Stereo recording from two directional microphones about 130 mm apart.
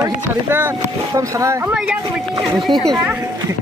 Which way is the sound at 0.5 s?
20° right (ahead or behind).